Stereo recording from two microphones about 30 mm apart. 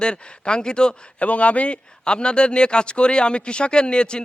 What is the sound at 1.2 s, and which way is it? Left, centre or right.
Speech, left.